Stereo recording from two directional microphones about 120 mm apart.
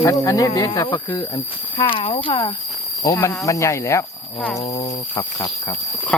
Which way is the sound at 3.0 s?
25° left (ahead or behind).